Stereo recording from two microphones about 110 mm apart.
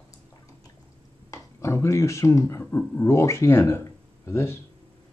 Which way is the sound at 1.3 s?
30° left (ahead or behind).